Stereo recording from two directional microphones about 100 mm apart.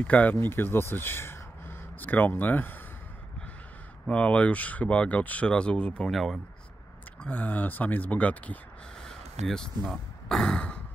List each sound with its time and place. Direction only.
0.0 s speech: 15° left (ahead or behind)
4.1 s speech: 10° left (ahead or behind)
7.2 s speech: 15° left (ahead or behind)